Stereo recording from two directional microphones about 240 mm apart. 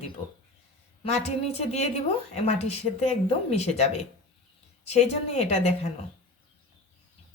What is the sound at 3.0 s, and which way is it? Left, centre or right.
A woman's voice, left.